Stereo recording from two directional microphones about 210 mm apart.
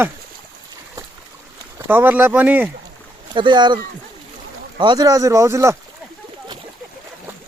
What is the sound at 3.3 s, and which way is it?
Speech, 20° right (ahead or behind).